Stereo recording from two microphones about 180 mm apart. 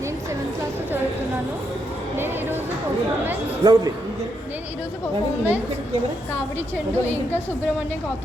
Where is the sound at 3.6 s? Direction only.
20° right (ahead or behind).